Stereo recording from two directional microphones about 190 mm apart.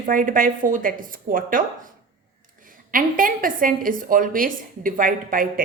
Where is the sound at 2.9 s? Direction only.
45° right (ahead or behind).